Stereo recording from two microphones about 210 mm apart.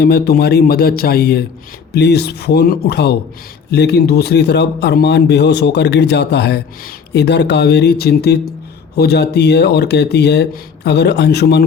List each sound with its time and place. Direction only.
0.0 s speech: 50° left (ahead or behind)